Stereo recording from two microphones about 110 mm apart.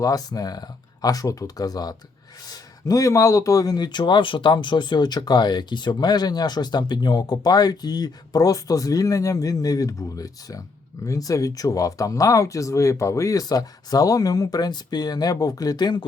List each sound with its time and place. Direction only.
0.0 s speech: 35° left (ahead or behind)